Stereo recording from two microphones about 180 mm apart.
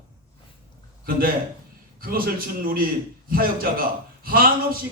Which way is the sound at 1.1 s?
55° right (ahead or behind).